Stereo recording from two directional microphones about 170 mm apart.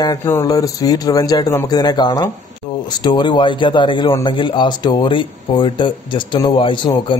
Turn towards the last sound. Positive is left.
turn(degrees=30)  # may be behind; listen again after turning